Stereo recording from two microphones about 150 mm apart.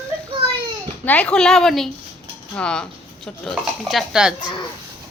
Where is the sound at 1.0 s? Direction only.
10° left (ahead or behind).